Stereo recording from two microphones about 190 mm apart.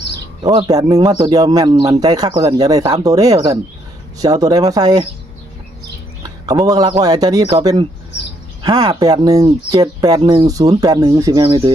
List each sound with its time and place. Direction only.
0.4 s speech: 20° right (ahead or behind)
6.4 s speech: 20° right (ahead or behind)